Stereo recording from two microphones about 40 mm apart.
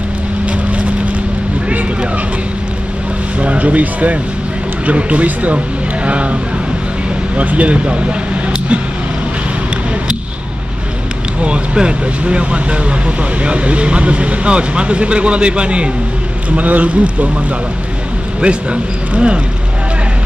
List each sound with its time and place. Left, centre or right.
0.5 s vehicle: right
3.3 s speech: right
7.4 s speech: right
11.4 s speech: right
16.4 s speech: right